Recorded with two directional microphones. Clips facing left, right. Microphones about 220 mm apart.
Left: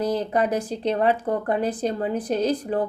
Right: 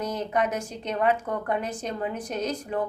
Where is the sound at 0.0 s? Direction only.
35° left (ahead or behind).